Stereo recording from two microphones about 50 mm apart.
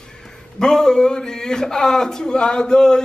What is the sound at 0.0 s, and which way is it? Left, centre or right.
A man's voice, centre.